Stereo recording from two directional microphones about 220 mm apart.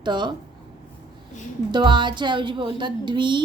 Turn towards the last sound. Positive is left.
turn(degrees=-20)  # may be behind; listen again after turning